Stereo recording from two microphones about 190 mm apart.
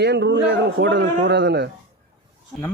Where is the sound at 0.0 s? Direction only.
65° right (ahead or behind).